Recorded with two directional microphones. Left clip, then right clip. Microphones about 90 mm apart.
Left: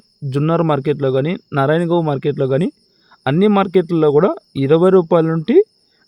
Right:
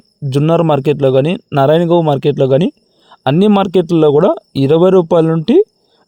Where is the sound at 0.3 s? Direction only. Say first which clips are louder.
Right 5 dB; 45° right (ahead or behind).